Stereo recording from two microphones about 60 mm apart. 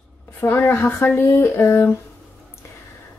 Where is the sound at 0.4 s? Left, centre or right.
Left.